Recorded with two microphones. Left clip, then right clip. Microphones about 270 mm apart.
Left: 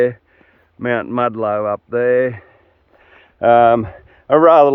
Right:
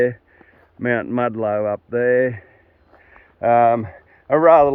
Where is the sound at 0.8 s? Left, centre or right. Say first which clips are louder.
Left 2 dB; centre.